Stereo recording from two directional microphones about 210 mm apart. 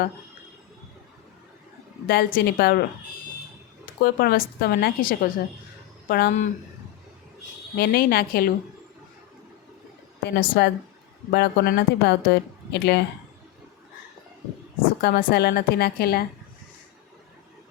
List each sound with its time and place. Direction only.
2.0 s speech: 50° left (ahead or behind)
4.0 s speech: 45° left (ahead or behind)
7.8 s speech: 45° left (ahead or behind)
10.2 s speech: 45° left (ahead or behind)
15.0 s speech: 45° left (ahead or behind)